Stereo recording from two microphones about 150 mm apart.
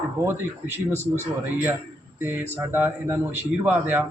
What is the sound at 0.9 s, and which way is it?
Speech, 15° left (ahead or behind).